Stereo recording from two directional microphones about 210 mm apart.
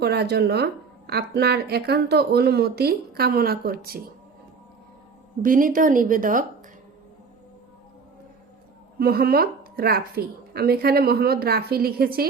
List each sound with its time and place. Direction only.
0.0 s speech: 50° right (ahead or behind)
5.4 s speech: 40° right (ahead or behind)
9.0 s speech: 45° right (ahead or behind)